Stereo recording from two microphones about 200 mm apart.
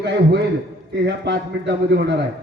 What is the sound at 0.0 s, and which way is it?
A man's voice, 60° right (ahead or behind).